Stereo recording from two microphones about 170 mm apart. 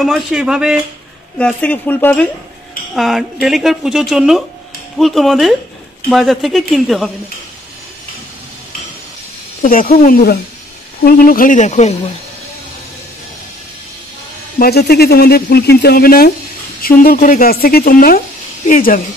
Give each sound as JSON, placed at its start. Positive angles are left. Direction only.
{"t": 0.0, "sound": "a woman's voice", "side_deg": -5}
{"t": 1.4, "sound": "speech", "side_deg": 10}
{"t": 2.9, "sound": "a woman's voice", "side_deg": 0}
{"t": 9.6, "sound": "a woman's voice", "side_deg": 55}
{"t": 14.6, "sound": "a woman's voice", "side_deg": 65}